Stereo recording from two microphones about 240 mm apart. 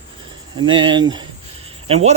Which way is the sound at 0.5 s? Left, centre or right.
Centre.